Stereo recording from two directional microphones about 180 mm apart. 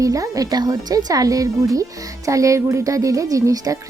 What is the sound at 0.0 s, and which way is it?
Speech, 20° right (ahead or behind).